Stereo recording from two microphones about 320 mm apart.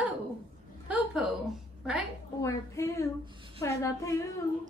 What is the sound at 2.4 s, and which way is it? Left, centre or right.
A woman's voice, centre.